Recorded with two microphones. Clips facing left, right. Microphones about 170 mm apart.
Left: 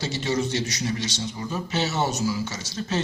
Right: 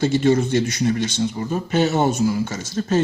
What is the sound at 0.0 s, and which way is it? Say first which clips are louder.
Speech: right 9 dB; 50° right (ahead or behind).